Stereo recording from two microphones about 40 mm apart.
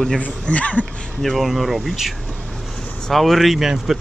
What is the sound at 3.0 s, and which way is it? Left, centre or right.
Speech, centre.